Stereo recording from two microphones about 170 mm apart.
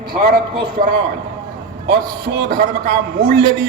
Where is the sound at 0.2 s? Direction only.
60° right (ahead or behind).